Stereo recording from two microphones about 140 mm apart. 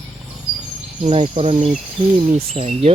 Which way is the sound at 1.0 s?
50° right (ahead or behind).